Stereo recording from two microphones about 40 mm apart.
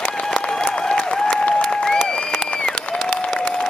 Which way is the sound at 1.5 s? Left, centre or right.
Centre.